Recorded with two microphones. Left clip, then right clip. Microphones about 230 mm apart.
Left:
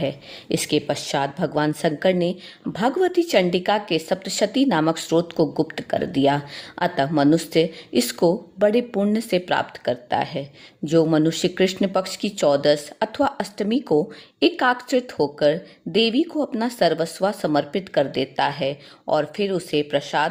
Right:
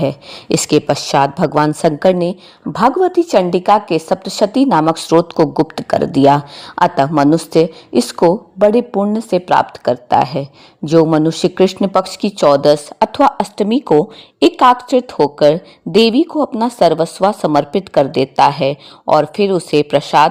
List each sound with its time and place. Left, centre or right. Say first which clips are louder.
0.0 s a woman's voice: right 8 dB; right